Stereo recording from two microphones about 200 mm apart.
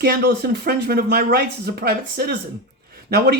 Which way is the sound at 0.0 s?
50° right (ahead or behind).